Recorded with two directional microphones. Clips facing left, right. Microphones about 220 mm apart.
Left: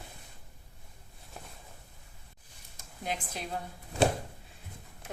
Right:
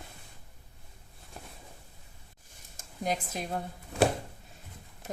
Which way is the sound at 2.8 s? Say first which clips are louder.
Right 5 dB; 45° right (ahead or behind).